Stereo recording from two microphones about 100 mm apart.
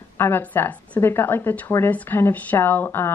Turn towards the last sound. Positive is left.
turn(degrees=20)  # may be behind; listen again after turning